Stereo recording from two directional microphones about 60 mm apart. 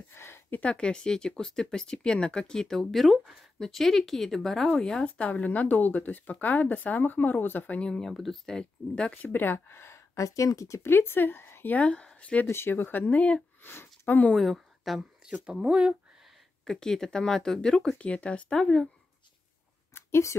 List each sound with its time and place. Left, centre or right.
0.1 s a sound: left
0.6 s speech: centre
5.0 s speech: left
7.9 s speech: centre
9.2 s speech: left
10.8 s speech: left
11.7 s speech: centre
12.4 s speech: left
13.6 s a sound: left
14.3 s speech: centre
15.4 s speech: centre
16.6 s speech: centre
18.0 s speech: left
19.9 s a sound: left